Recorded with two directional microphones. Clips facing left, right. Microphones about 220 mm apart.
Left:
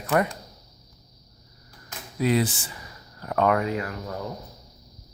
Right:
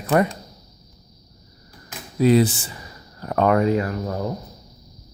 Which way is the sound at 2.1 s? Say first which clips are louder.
Right 7 dB; 35° right (ahead or behind).